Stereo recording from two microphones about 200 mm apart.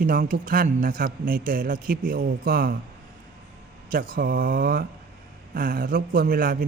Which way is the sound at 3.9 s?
45° right (ahead or behind).